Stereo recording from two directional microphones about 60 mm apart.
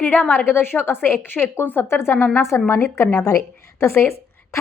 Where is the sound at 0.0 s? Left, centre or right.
Left.